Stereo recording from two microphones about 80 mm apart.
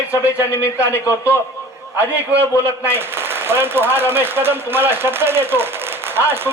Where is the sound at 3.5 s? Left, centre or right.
Right.